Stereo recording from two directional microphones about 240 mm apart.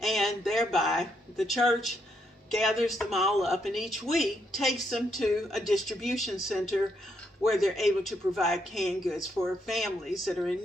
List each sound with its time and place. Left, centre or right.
0.0 s speech: centre
7.4 s speech: centre